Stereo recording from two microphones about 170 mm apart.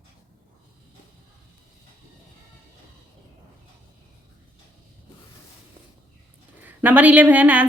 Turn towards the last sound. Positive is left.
turn(degrees=-10)  # may be behind; listen again after turning